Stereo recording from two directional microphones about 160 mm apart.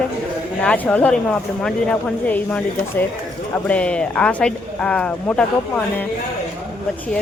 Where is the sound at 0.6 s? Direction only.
5° left (ahead or behind).